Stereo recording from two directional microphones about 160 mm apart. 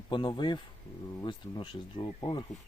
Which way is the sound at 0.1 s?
30° left (ahead or behind).